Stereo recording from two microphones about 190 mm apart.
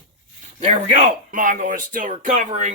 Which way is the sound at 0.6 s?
40° right (ahead or behind).